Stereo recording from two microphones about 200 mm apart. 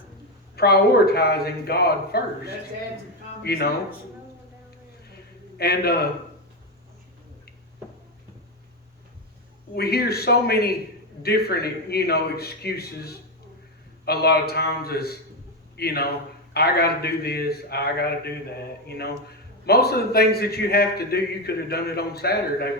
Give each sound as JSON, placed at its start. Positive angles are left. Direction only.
{"t": 0.5, "sound": "a man's voice", "side_deg": 50}
{"t": 5.5, "sound": "a man's voice", "side_deg": 50}
{"t": 9.7, "sound": "a man's voice", "side_deg": 50}